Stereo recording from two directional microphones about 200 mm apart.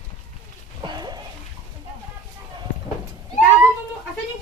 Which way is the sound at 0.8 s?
20° right (ahead or behind).